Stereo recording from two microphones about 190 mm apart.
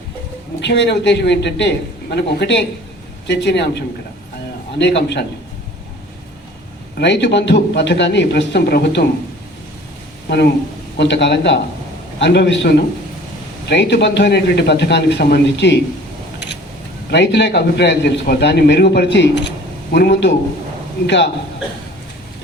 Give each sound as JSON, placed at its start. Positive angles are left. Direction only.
{"t": 0.6, "sound": "a man's voice", "side_deg": 65}
{"t": 6.9, "sound": "a man's voice", "side_deg": 65}
{"t": 10.2, "sound": "a man's voice", "side_deg": 60}
{"t": 17.1, "sound": "a man's voice", "side_deg": 65}